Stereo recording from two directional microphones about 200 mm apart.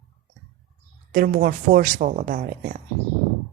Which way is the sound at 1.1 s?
40° right (ahead or behind).